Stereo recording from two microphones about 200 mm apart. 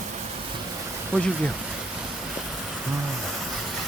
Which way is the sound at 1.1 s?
10° right (ahead or behind).